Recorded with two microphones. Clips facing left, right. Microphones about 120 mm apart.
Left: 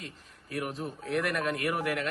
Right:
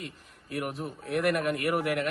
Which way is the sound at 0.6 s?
15° right (ahead or behind).